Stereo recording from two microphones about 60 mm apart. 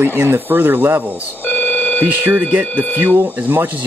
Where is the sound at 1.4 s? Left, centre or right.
Left.